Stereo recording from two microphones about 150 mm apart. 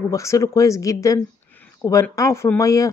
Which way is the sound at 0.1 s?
20° left (ahead or behind).